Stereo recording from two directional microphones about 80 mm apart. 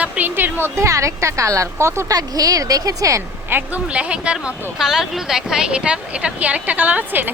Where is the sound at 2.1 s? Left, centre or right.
Right.